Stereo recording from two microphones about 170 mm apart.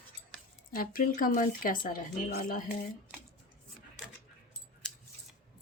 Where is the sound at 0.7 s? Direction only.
55° left (ahead or behind).